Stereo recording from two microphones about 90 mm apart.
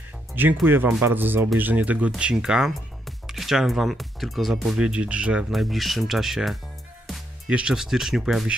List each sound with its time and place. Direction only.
0.3 s speech: 20° right (ahead or behind)
5.5 s speech: centre (ahead or behind)